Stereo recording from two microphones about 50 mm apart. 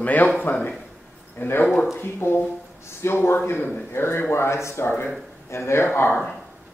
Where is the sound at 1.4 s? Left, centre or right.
Left.